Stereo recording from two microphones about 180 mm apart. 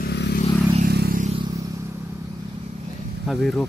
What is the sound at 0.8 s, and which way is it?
Vehicle, 60° right (ahead or behind).